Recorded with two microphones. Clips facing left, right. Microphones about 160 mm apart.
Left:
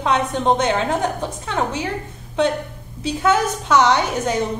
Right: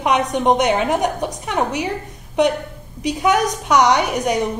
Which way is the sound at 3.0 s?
15° right (ahead or behind).